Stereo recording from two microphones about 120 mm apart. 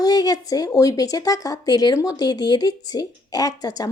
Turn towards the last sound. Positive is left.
turn(degrees=30)  # may be behind; listen again after turning